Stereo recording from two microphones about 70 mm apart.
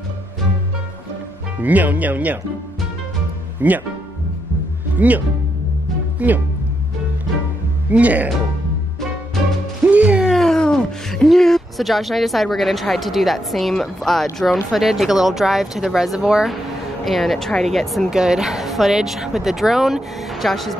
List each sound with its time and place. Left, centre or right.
1.6 s speech: right
3.6 s speech: right
5.0 s speech: right
7.9 s speech: right
9.8 s music: centre
10.3 s a woman's voice: centre